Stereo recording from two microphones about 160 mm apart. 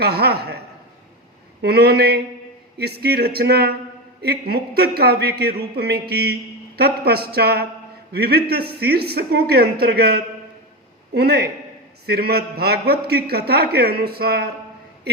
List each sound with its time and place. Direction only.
0.0 s a man's voice: 85° right
1.6 s a man's voice: 80° right
4.2 s a man's voice: 80° right